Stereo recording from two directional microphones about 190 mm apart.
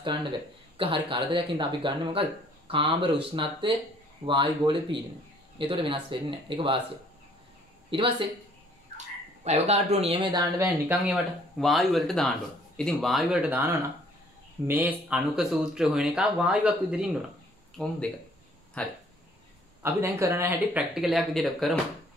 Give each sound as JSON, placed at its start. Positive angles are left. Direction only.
{"t": 0.7, "sound": "speech", "side_deg": -30}
{"t": 7.9, "sound": "speech", "side_deg": -25}
{"t": 8.9, "sound": "frog", "side_deg": -35}
{"t": 10.3, "sound": "speech", "side_deg": -10}
{"t": 11.0, "sound": "speech", "side_deg": 0}
{"t": 17.8, "sound": "speech", "side_deg": 5}
{"t": 19.8, "sound": "speech", "side_deg": -15}